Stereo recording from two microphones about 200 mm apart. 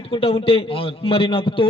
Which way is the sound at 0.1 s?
25° left (ahead or behind).